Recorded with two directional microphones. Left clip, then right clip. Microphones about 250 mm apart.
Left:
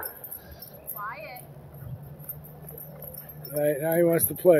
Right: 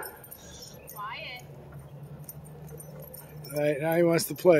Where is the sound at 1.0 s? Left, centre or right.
Right.